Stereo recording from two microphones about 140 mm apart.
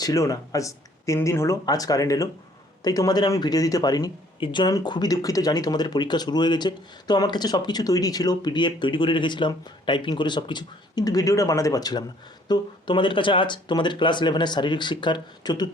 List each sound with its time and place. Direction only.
0.0 s speech: 25° left (ahead or behind)